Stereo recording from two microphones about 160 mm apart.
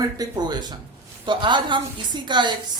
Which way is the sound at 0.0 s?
25° right (ahead or behind).